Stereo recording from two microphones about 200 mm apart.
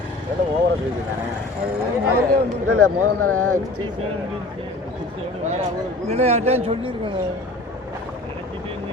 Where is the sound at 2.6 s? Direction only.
90° right.